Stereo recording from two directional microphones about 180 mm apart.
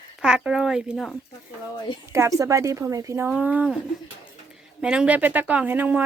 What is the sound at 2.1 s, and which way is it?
Speech, 15° right (ahead or behind).